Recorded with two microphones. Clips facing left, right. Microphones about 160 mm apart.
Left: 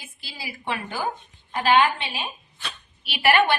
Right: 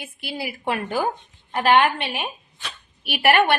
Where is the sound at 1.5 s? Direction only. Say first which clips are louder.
Right 2 dB; 60° right (ahead or behind).